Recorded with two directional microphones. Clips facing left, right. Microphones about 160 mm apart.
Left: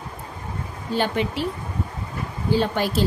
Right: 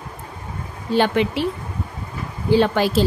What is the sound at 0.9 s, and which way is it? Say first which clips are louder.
Speech: right 5 dB; 80° right.